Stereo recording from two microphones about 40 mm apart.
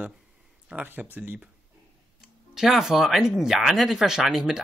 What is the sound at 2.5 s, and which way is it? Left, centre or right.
Speech, centre.